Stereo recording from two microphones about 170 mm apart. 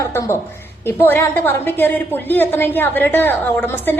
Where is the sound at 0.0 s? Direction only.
15° left (ahead or behind).